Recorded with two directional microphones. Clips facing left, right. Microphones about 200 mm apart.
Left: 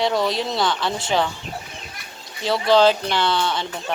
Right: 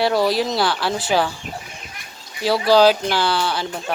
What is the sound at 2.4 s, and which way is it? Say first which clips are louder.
Speech: right 2 dB; 5° right (ahead or behind).